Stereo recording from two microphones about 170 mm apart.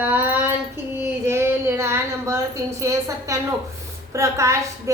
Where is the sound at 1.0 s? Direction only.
15° right (ahead or behind).